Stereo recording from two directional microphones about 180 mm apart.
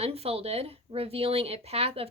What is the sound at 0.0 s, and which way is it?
A woman's voice, 35° right (ahead or behind).